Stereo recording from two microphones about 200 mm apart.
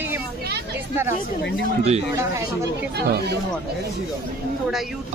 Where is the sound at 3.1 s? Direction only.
55° right (ahead or behind).